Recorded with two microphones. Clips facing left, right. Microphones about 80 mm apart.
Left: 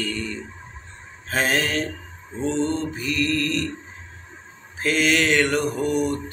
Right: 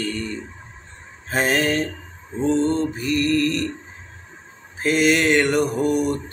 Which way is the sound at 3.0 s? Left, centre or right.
Right.